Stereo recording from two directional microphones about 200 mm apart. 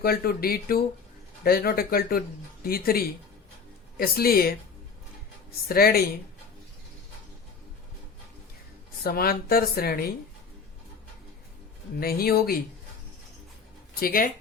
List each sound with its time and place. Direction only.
0.0 s a woman's voice: 50° left (ahead or behind)
9.0 s a woman's voice: 50° left (ahead or behind)
11.9 s a woman's voice: 50° left (ahead or behind)
14.0 s a woman's voice: 45° left (ahead or behind)